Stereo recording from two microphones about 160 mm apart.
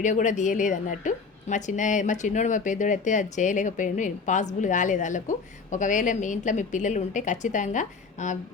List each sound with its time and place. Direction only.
0.0 s a woman's voice: 50° left (ahead or behind)